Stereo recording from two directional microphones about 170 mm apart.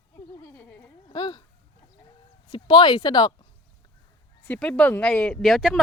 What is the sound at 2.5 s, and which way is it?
Speech, 25° left (ahead or behind).